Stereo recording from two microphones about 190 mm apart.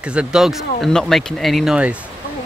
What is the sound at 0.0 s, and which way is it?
Speech, 5° right (ahead or behind).